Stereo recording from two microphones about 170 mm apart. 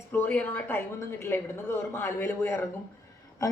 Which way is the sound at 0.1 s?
10° left (ahead or behind).